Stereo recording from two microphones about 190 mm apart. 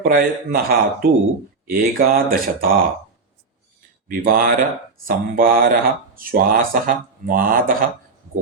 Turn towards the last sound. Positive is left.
turn(degrees=-50)  # may be behind; listen again after turning